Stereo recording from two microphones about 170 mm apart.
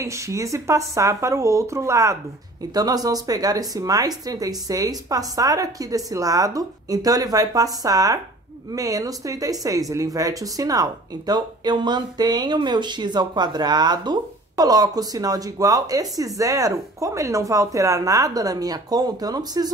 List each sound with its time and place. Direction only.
0.0 s speech: 15° right (ahead or behind)